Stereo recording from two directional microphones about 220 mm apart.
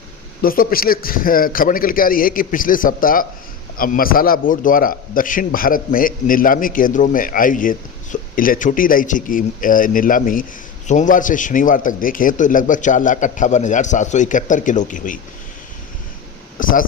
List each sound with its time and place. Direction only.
0.4 s a man's voice: 40° left (ahead or behind)
16.6 s a man's voice: 40° left (ahead or behind)